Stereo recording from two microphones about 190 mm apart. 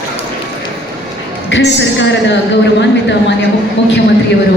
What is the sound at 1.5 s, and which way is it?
Speech, 65° left (ahead or behind).